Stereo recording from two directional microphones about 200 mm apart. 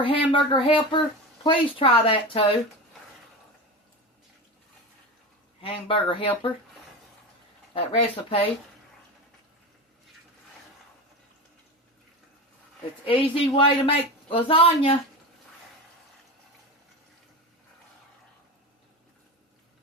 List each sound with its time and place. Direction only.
0.0 s speech: 25° left (ahead or behind)
5.6 s speech: 25° left (ahead or behind)
7.7 s speech: 25° left (ahead or behind)
13.1 s speech: 25° left (ahead or behind)